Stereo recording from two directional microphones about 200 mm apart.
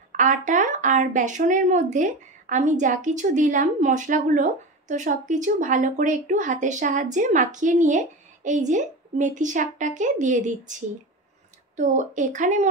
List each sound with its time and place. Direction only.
0.1 s speech: 40° right (ahead or behind)